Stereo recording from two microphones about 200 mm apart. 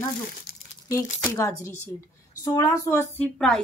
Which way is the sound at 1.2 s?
15° left (ahead or behind).